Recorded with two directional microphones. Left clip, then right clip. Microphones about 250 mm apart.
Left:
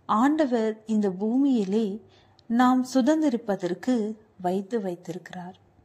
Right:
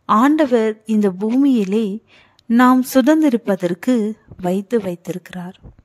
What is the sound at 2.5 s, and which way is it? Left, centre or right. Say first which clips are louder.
A woman's voice: right 9 dB; right.